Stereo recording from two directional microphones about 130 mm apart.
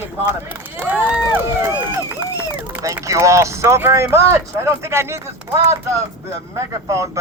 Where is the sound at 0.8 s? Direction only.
15° right (ahead or behind).